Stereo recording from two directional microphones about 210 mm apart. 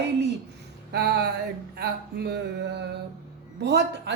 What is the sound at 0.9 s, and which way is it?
A woman's voice, 50° right (ahead or behind).